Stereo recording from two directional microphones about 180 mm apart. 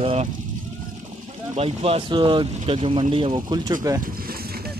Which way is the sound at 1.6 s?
35° right (ahead or behind).